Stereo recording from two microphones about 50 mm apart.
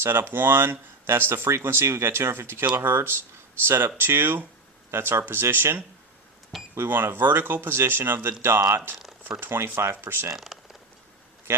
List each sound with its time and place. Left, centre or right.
0.0 s speech: right
1.5 s speech: right
4.9 s speech: right
10.3 s a sound: centre